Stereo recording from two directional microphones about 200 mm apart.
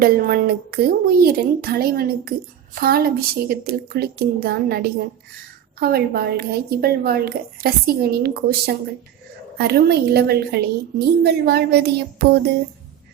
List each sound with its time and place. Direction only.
0.0 s a woman's voice: 50° right (ahead or behind)